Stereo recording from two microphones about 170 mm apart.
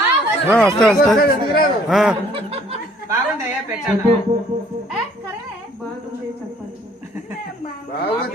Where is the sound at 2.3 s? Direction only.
35° right (ahead or behind).